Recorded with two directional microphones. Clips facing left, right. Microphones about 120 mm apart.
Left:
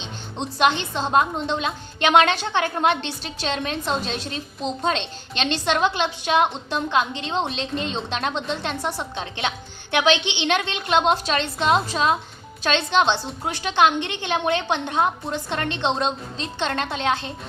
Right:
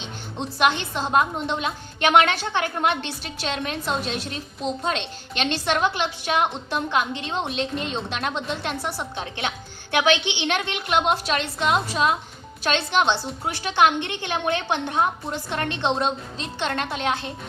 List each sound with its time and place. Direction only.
0.0 s music: 25° left (ahead or behind)
0.9 s a woman's voice: 25° left (ahead or behind)
10.1 s a woman's voice: 20° left (ahead or behind)